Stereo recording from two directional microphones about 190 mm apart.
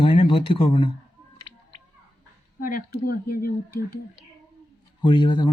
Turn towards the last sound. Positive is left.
turn(degrees=25)  # may be behind; listen again after turning